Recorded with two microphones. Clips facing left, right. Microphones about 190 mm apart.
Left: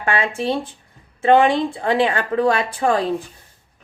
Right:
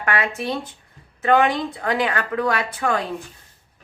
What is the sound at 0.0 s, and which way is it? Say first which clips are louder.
Speech: left 3 dB; 30° left (ahead or behind).